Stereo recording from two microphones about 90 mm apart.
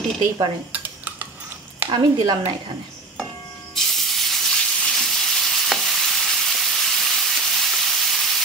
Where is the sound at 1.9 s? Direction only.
65° right (ahead or behind).